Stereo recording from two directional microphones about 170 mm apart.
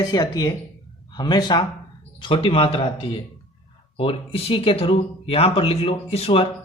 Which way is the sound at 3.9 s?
35° left (ahead or behind).